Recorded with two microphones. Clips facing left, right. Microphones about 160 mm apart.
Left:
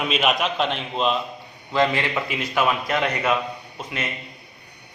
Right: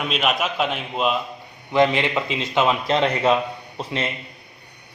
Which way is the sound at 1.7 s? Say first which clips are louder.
Right 3 dB; 20° right (ahead or behind).